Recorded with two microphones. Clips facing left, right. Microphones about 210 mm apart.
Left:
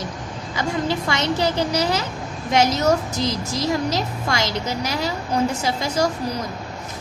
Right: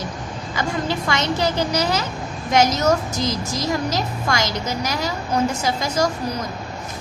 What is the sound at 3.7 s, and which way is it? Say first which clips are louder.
A woman's voice: even; 25° left (ahead or behind).